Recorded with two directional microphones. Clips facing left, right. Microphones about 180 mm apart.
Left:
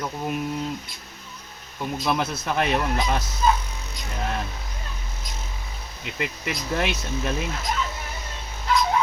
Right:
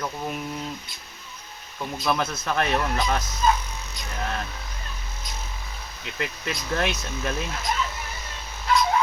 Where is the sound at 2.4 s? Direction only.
15° left (ahead or behind).